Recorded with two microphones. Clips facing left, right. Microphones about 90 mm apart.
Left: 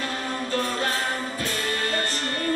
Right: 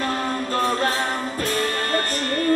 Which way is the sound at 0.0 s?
45° right (ahead or behind).